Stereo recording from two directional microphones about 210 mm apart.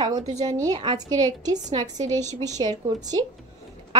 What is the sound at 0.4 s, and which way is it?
A woman's voice, 15° right (ahead or behind).